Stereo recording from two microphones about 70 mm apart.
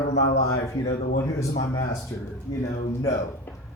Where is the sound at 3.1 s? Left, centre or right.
Left.